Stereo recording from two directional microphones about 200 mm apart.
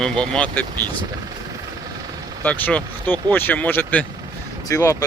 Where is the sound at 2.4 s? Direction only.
10° left (ahead or behind).